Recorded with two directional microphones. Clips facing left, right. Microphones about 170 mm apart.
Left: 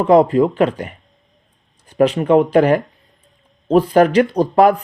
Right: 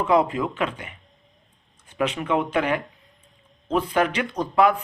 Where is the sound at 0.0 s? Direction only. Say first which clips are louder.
Left 9 dB; 35° left (ahead or behind).